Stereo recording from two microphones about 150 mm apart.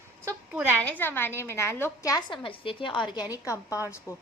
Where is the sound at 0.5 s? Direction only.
10° right (ahead or behind).